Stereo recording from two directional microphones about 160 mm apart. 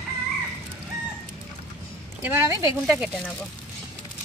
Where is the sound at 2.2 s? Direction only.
15° right (ahead or behind).